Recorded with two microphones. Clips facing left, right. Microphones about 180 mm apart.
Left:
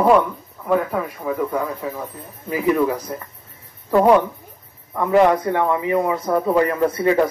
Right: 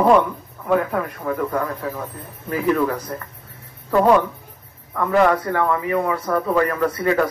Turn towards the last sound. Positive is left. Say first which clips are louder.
# left 2 dB
turn(degrees=20)  # may be behind; listen again after turning